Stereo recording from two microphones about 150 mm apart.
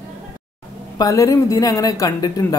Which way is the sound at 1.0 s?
20° left (ahead or behind).